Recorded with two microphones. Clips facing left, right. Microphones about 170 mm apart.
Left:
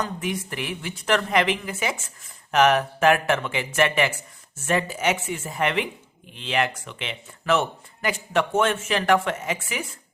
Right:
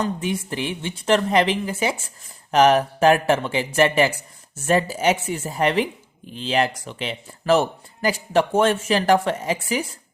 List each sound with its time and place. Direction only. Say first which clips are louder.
0.0 s a woman's voice: right 4 dB; 30° right (ahead or behind)